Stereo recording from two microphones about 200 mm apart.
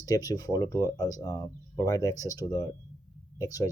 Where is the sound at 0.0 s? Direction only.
20° left (ahead or behind).